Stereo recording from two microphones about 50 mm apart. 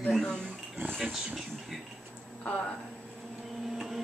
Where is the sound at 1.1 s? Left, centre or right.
Centre.